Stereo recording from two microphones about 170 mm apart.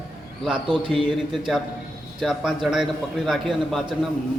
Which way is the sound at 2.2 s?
Centre (ahead or behind).